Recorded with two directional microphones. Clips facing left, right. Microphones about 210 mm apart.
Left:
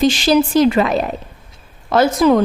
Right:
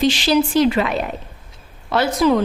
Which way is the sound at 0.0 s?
45° left (ahead or behind).